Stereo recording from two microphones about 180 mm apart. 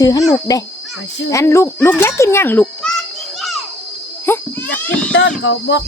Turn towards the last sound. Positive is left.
turn(degrees=75)  # may be behind; listen again after turning